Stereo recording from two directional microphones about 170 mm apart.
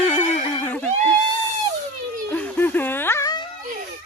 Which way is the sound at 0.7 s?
10° left (ahead or behind).